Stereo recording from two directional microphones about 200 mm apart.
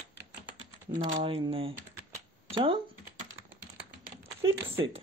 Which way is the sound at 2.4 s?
25° right (ahead or behind).